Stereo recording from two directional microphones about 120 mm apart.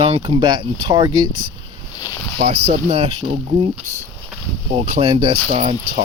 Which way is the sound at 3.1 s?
40° right (ahead or behind).